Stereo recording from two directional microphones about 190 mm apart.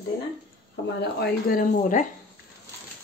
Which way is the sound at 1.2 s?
45° left (ahead or behind).